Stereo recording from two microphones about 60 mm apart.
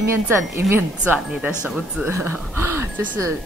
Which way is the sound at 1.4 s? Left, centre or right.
Right.